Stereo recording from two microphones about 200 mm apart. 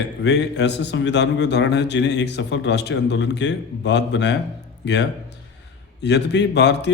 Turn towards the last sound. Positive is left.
turn(degrees=60)  # may be behind; listen again after turning